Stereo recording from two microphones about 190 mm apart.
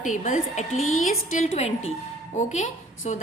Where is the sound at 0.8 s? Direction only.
90° left.